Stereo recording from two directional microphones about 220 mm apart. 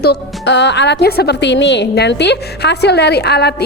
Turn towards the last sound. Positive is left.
turn(degrees=50)  # may be behind; listen again after turning